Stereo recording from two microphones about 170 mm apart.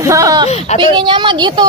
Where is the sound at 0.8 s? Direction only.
30° right (ahead or behind).